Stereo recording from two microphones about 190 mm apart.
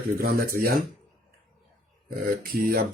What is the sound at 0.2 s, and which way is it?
Speech, 50° right (ahead or behind).